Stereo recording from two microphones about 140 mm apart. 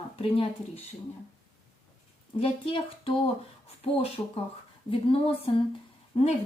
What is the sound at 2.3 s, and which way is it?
A woman's voice, 40° left (ahead or behind).